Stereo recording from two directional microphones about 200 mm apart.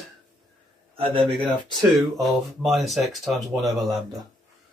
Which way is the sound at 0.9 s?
30° right (ahead or behind).